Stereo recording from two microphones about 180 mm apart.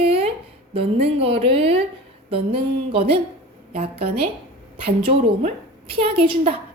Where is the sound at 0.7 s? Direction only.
35° right (ahead or behind).